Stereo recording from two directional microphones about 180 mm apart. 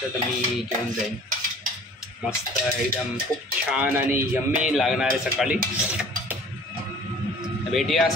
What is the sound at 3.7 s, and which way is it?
A man's voice, 5° right (ahead or behind).